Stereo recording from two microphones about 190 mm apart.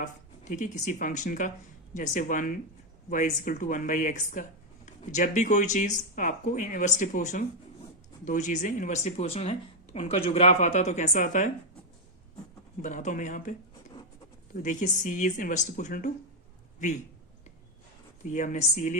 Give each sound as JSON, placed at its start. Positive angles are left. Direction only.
{"t": 0.0, "sound": "speech", "side_deg": 45}
{"t": 12.8, "sound": "speech", "side_deg": 40}
{"t": 14.5, "sound": "speech", "side_deg": 40}
{"t": 18.2, "sound": "speech", "side_deg": 40}